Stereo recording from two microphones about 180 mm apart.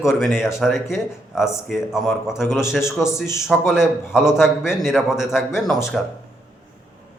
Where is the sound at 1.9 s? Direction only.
5° right (ahead or behind).